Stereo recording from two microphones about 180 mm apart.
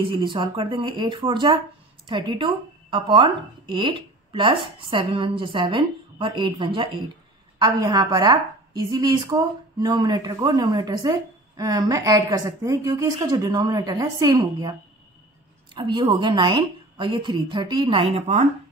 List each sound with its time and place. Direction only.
0.0 s a woman's voice: 30° right (ahead or behind)